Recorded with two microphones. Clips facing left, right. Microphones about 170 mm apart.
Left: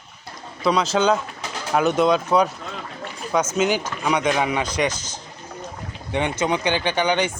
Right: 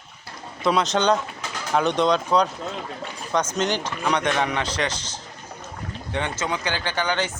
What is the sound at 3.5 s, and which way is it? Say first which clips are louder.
Speech: left 3 dB; 10° left (ahead or behind).